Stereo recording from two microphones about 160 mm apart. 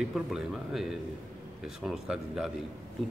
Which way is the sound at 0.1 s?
Centre (ahead or behind).